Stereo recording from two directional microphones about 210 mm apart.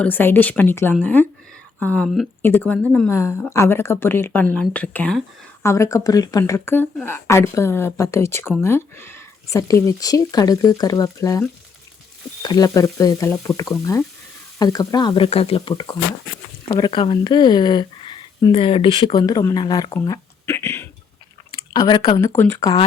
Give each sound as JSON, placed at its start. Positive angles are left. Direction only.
{"t": 0.0, "sound": "speech", "side_deg": 10}